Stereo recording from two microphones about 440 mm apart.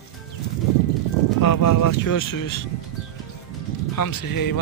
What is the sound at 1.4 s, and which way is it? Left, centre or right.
Speech, left.